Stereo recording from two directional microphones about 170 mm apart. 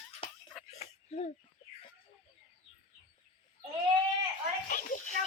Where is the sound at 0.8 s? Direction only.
40° left (ahead or behind).